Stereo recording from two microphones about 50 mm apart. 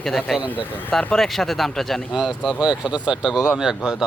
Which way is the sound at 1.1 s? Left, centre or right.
Centre.